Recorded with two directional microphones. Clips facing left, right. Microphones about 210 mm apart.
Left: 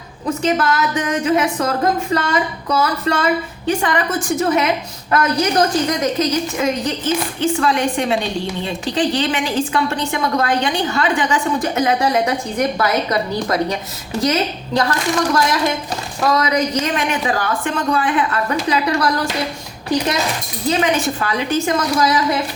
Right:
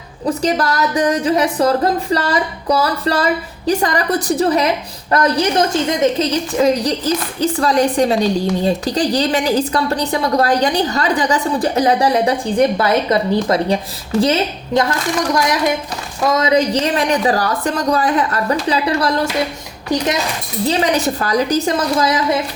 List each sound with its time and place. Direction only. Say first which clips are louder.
0.3 s a woman's voice: right 1 dB; 35° right (ahead or behind)
16.3 s a woman's voice: right 4 dB; 25° right (ahead or behind)
20.7 s a woman's voice: right 1 dB; 35° right (ahead or behind)